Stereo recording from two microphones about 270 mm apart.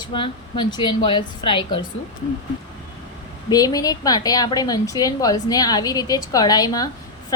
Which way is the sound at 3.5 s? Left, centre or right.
Centre.